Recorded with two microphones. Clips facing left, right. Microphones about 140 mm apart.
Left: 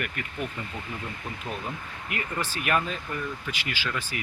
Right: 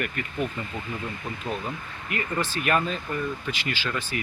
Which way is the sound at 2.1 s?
10° left (ahead or behind).